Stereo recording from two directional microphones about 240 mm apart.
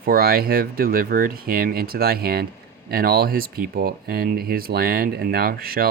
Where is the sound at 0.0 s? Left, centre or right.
Right.